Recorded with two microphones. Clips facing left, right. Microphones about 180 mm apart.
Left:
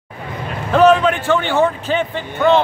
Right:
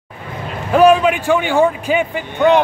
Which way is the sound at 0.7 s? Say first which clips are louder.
Right 1 dB; 10° right (ahead or behind).